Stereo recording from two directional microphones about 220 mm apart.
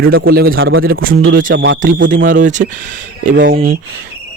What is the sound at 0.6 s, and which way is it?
Speech, 65° right (ahead or behind).